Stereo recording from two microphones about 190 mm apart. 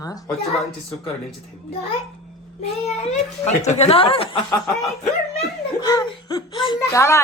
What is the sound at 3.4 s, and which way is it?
Speech, 35° left (ahead or behind).